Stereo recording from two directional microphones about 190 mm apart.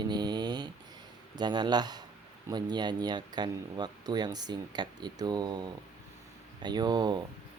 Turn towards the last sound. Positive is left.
turn(degrees=-20)  # may be behind; listen again after turning